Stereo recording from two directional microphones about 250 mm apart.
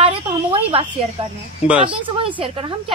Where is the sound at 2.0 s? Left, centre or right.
Centre.